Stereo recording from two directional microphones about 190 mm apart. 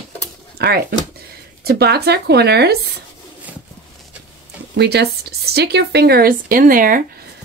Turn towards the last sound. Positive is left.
turn(degrees=-45)  # may be behind; listen again after turning